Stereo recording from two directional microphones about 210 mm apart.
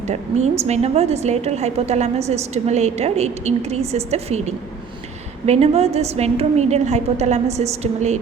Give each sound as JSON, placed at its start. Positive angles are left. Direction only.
{"t": 0.1, "sound": "a woman's voice", "side_deg": -30}